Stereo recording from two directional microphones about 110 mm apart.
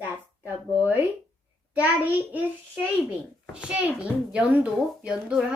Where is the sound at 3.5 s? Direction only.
10° right (ahead or behind).